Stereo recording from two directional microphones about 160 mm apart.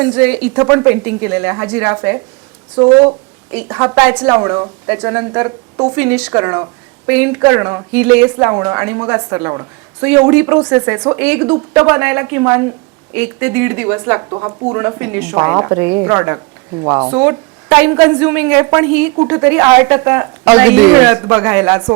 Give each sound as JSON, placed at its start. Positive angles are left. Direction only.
{"t": 0.0, "sound": "a woman's voice", "side_deg": -10}
{"t": 2.7, "sound": "speech", "side_deg": -40}
{"t": 3.5, "sound": "a woman's voice", "side_deg": -10}